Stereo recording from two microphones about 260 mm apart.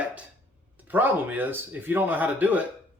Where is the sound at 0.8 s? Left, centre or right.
Centre.